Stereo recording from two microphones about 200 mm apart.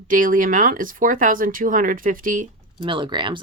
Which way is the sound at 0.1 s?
40° right (ahead or behind).